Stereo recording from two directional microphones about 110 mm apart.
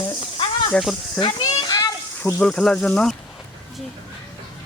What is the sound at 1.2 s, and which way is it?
Snake, 35° left (ahead or behind).